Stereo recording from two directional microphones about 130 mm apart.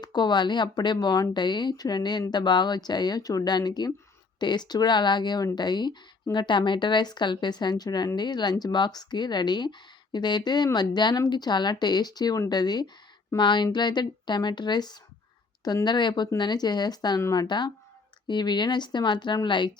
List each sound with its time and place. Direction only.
0.0 s a woman's voice: 35° left (ahead or behind)
17.2 s speech: 20° left (ahead or behind)
17.4 s a woman's voice: 35° left (ahead or behind)